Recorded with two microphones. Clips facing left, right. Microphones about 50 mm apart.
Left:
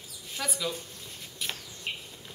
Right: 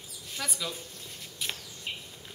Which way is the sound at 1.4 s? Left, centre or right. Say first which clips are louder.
Even; centre.